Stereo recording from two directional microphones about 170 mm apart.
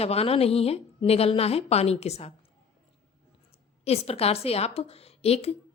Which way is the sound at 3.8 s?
35° left (ahead or behind).